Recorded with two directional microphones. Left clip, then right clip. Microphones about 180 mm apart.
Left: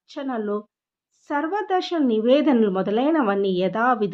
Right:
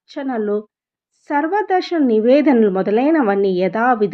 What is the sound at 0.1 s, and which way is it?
A woman's voice, 15° right (ahead or behind).